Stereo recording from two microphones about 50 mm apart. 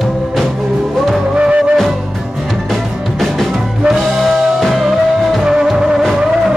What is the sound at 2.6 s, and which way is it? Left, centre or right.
Music, centre.